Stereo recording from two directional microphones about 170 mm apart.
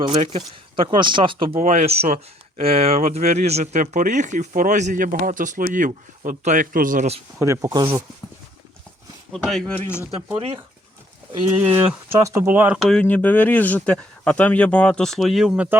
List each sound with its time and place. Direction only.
0.0 s speech: 35° right (ahead or behind)
1.5 s speech: 45° right (ahead or behind)
7.3 s speech: 15° right (ahead or behind)
9.3 s speech: centre (ahead or behind)
11.5 s speech: 10° right (ahead or behind)